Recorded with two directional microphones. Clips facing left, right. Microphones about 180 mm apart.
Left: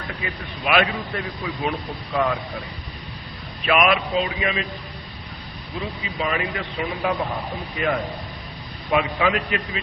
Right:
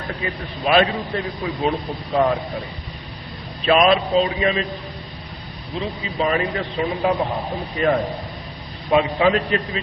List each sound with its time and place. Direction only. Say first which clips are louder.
0.1 s a man's voice: right 6 dB; 35° right (ahead or behind)
3.7 s a man's voice: right 4 dB; 30° right (ahead or behind)
5.8 s speech: right 3 dB; 25° right (ahead or behind)
6.1 s a man's voice: right 5 dB; 35° right (ahead or behind)